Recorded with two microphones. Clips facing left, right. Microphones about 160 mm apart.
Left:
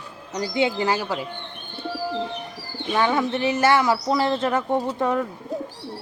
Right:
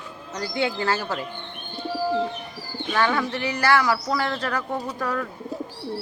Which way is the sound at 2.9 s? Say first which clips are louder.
Left 2 dB; 20° left (ahead or behind).